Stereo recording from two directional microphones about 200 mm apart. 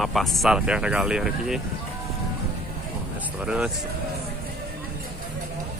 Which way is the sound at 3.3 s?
5° right (ahead or behind).